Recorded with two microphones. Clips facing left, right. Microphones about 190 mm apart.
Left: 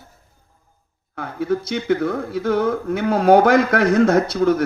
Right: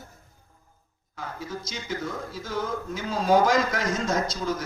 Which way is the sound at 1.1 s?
60° left (ahead or behind).